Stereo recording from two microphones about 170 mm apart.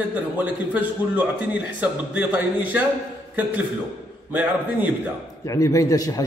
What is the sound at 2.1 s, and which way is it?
Speech, 10° right (ahead or behind).